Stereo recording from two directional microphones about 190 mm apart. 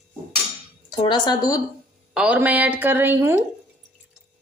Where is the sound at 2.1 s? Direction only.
5° right (ahead or behind).